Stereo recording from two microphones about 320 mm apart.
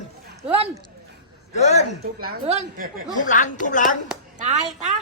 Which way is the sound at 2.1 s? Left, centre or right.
Right.